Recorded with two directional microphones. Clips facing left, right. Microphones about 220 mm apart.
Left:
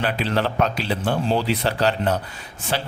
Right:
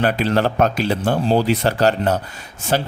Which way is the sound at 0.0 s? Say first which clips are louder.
Right 5 dB; 45° right (ahead or behind).